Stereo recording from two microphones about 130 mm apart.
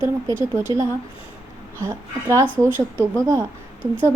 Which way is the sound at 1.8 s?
20° right (ahead or behind).